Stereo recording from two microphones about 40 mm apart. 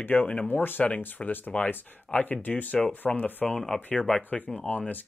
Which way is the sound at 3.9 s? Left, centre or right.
Left.